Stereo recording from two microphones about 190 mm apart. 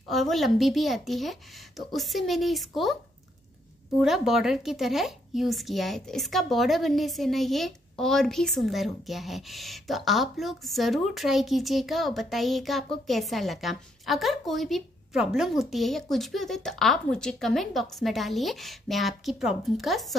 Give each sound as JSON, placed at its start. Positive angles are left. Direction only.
{"t": 0.1, "sound": "speech", "side_deg": 0}
{"t": 4.0, "sound": "speech", "side_deg": 0}